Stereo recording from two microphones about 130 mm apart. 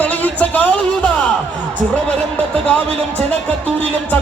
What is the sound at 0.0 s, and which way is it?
Music, 10° left (ahead or behind).